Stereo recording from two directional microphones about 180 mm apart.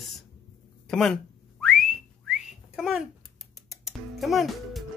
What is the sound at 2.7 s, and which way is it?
Speech, centre (ahead or behind).